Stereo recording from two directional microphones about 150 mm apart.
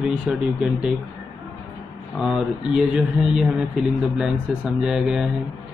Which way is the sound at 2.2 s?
5° right (ahead or behind).